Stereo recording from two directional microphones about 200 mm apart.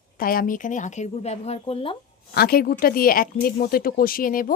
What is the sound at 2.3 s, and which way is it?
Speech, 50° left (ahead or behind).